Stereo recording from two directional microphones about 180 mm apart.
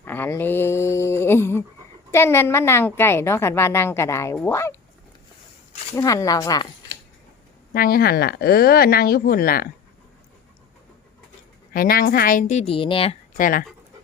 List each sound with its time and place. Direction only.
0.0 s a sound: 10° left (ahead or behind)
2.1 s a woman's voice: 15° left (ahead or behind)
5.9 s speech: 15° left (ahead or behind)
7.7 s a woman's voice: 55° left (ahead or behind)
11.7 s a woman's voice: 55° left (ahead or behind); by 13.1 s 30° left (ahead or behind)
13.3 s a woman's voice: 50° left (ahead or behind)